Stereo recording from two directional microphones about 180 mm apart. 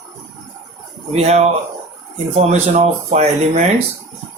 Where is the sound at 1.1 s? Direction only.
35° right (ahead or behind).